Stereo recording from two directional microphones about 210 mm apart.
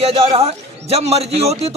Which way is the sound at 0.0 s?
30° right (ahead or behind).